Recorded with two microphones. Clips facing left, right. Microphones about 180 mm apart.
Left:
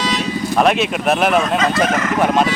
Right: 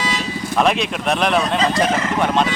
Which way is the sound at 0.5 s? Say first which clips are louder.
Left 2 dB; 5° left (ahead or behind).